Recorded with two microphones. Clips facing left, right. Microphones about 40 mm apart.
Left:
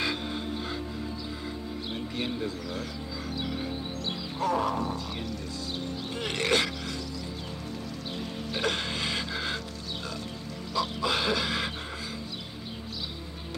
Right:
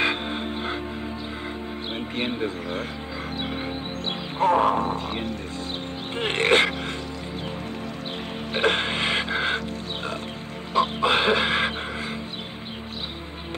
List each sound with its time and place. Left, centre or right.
0.0 s music: right
2.0 s a man's voice: right
3.3 s music: right
4.4 s wild animals: right
8.5 s music: right
10.7 s chicken: right